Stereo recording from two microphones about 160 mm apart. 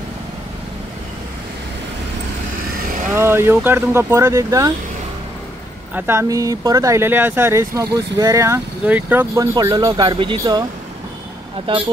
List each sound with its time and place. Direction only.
3.2 s speech: 15° right (ahead or behind)
5.9 s speech: 15° right (ahead or behind)